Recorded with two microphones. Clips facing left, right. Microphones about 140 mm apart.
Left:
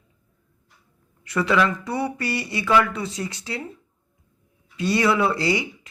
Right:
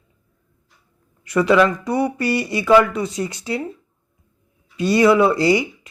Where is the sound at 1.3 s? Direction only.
20° right (ahead or behind).